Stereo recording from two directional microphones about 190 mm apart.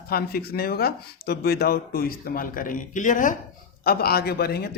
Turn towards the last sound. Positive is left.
turn(degrees=55)  # may be behind; listen again after turning